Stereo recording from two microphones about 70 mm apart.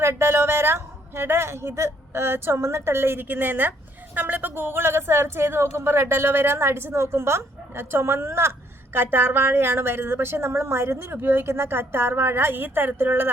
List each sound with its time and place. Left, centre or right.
0.0 s a woman's voice: right